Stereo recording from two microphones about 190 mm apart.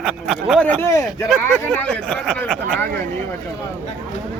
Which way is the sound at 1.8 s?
5° left (ahead or behind).